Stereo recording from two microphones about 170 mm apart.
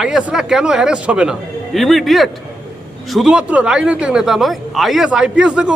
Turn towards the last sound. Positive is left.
turn(degrees=-5)  # may be behind; listen again after turning